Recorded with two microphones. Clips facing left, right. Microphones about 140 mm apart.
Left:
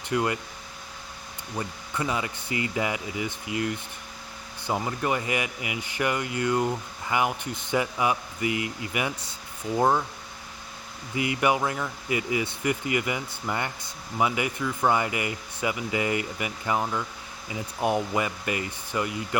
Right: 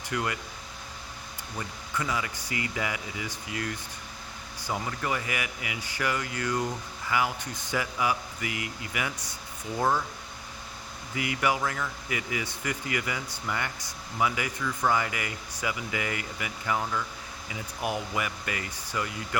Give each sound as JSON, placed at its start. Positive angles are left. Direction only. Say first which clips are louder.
{"t": 0.1, "sound": "speech", "louder": "left 5 dB", "side_deg": 25}
{"t": 1.5, "sound": "speech", "louder": "left 3 dB", "side_deg": 25}
{"t": 11.1, "sound": "speech", "louder": "left 4 dB", "side_deg": 25}